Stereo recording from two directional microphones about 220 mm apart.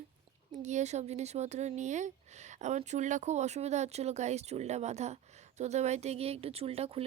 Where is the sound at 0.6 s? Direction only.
30° right (ahead or behind).